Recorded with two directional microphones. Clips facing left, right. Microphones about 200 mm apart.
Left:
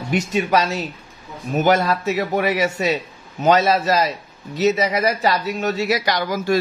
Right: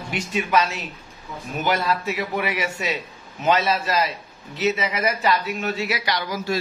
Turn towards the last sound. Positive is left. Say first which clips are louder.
# left 5 dB
turn(degrees=50)  # may be behind; listen again after turning